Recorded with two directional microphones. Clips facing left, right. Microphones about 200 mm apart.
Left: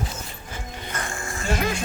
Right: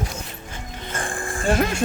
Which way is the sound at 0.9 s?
30° right (ahead or behind).